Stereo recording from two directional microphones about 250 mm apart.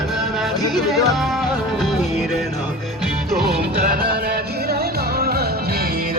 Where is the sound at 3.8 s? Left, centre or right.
Right.